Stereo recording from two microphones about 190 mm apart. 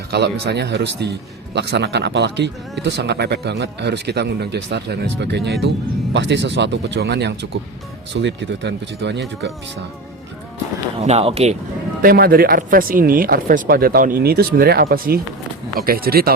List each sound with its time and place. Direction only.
0.1 s a man's voice: 60° right (ahead or behind)
11.0 s speech: 35° right (ahead or behind)
12.0 s speech: 55° right (ahead or behind)